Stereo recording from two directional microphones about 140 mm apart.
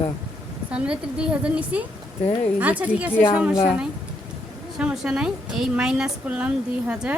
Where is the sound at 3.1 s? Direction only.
15° left (ahead or behind).